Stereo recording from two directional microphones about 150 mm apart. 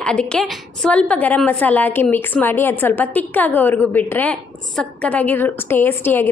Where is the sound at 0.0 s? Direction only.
5° left (ahead or behind).